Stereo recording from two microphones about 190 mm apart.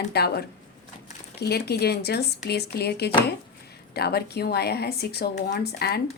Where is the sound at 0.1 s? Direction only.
60° left (ahead or behind).